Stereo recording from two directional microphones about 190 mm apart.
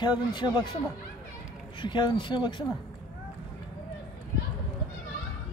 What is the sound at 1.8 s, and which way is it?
Speech, 25° left (ahead or behind).